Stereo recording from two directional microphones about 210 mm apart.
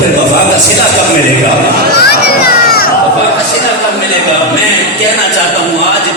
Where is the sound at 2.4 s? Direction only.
45° left (ahead or behind).